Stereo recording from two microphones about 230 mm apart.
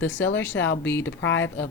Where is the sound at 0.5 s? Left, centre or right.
Left.